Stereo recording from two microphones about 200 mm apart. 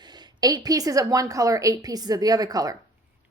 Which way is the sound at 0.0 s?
20° right (ahead or behind).